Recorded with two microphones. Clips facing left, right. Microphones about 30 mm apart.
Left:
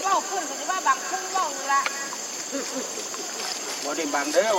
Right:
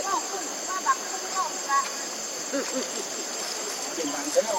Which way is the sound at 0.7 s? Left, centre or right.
Left.